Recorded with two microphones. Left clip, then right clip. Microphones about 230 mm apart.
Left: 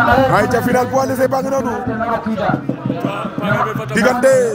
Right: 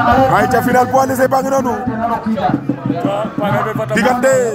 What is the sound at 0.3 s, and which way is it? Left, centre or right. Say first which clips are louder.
Speech: right 2 dB; centre.